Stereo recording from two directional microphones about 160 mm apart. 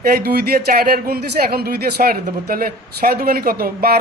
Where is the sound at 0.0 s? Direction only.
75° right (ahead or behind).